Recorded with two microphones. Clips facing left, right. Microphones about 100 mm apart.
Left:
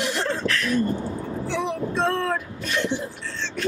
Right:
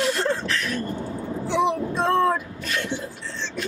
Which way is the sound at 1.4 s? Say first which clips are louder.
Right 5 dB; 15° right (ahead or behind).